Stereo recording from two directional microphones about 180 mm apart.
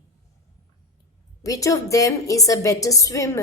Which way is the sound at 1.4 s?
20° left (ahead or behind).